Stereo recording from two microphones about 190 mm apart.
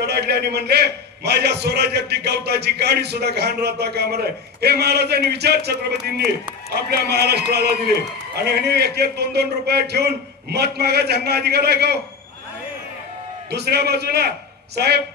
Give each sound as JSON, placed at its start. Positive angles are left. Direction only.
{"t": 0.0, "sound": "a man's voice", "side_deg": -60}
{"t": 13.5, "sound": "a man's voice", "side_deg": -60}